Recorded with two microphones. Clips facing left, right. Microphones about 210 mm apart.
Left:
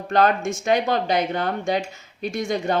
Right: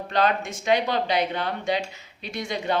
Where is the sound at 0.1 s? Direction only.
45° left (ahead or behind).